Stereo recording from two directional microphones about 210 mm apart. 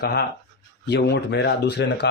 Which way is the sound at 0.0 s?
50° left (ahead or behind).